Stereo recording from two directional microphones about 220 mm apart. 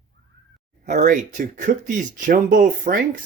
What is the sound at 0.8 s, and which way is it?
Speech, 35° right (ahead or behind).